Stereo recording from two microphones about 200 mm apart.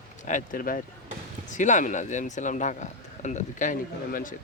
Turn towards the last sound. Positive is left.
turn(degrees=40)  # may be behind; listen again after turning